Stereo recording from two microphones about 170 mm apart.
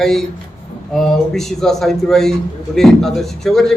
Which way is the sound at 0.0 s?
5° left (ahead or behind).